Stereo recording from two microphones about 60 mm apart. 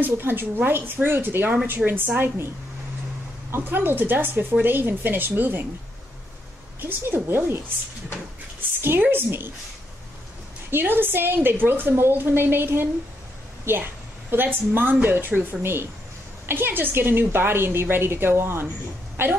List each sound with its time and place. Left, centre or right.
0.0 s a woman's voice: right
3.5 s a woman's voice: right
6.8 s a woman's voice: right
8.8 s a woman's voice: right
10.7 s a woman's voice: right